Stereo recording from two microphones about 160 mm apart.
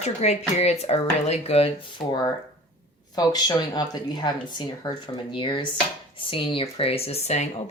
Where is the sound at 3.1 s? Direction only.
25° left (ahead or behind).